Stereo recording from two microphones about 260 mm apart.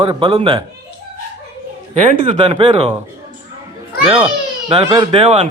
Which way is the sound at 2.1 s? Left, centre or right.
Right.